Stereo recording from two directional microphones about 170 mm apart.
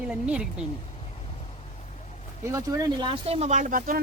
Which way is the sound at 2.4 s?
20° right (ahead or behind).